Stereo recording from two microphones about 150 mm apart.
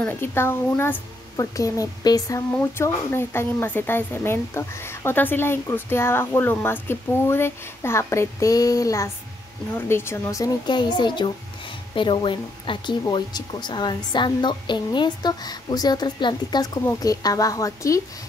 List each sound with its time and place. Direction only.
0.0 s speech: 15° left (ahead or behind)